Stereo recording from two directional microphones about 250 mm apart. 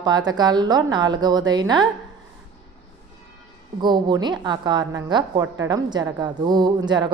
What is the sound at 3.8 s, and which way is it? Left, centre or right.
Speech, centre.